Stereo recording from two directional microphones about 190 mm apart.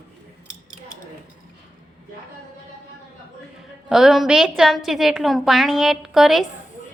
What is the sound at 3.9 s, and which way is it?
A woman's voice, centre (ahead or behind).